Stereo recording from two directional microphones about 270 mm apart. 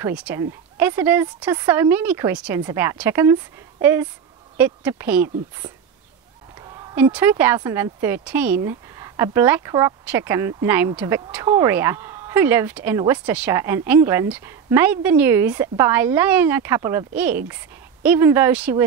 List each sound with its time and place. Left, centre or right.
0.0 s speech: centre
6.6 s a sound: centre
7.1 s speech: centre